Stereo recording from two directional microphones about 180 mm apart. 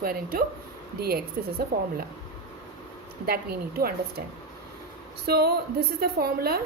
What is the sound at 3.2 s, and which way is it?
A woman's voice, 60° right (ahead or behind).